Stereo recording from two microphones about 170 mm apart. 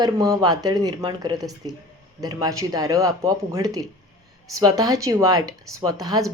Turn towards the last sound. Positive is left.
turn(degrees=-20)  # may be behind; listen again after turning